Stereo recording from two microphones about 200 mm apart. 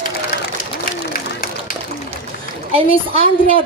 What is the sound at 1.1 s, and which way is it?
Run, 45° left (ahead or behind).